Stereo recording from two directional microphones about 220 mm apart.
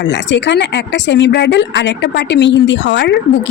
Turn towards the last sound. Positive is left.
turn(degrees=55)  # may be behind; listen again after turning